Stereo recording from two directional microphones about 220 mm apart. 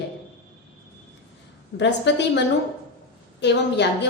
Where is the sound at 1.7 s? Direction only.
50° left (ahead or behind).